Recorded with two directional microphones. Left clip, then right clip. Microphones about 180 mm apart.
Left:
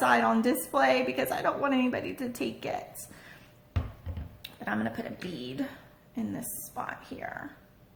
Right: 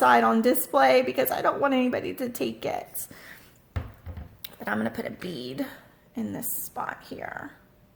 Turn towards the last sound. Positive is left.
turn(degrees=-45)  # may be behind; listen again after turning